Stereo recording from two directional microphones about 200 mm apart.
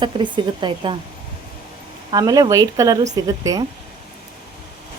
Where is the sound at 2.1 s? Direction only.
20° right (ahead or behind).